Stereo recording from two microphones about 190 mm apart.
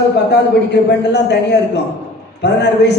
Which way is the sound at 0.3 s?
60° left (ahead or behind).